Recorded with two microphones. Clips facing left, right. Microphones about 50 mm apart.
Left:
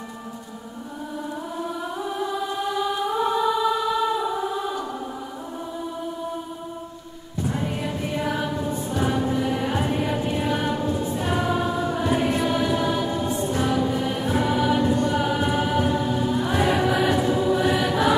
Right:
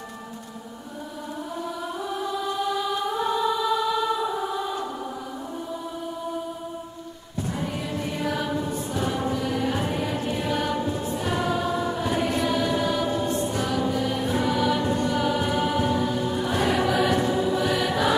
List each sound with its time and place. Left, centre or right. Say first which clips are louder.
3.1 s choir: left 3 dB; centre
7.4 s music: left 3 dB; centre
8.5 s choir: left 2 dB; centre
13.7 s music: left 2 dB; centre
15.0 s choir: left 1 dB; centre